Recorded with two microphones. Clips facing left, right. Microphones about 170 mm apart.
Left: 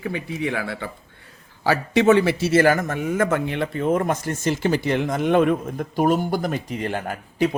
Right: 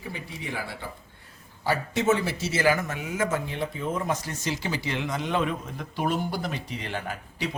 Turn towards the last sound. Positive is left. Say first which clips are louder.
# left 10 dB
turn(degrees=50)  # may be behind; listen again after turning